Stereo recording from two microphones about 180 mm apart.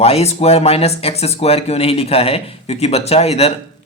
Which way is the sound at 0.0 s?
35° left (ahead or behind).